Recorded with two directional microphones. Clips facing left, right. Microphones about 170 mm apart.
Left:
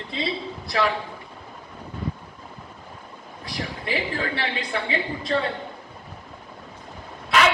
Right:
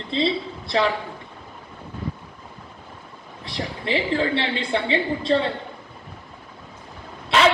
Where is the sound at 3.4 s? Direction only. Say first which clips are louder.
Right 3 dB; 25° right (ahead or behind).